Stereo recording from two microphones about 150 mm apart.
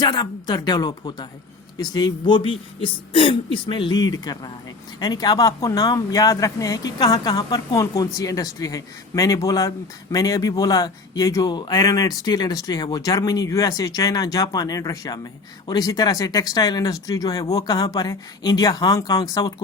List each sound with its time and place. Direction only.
0.0 s speech: 25° left (ahead or behind)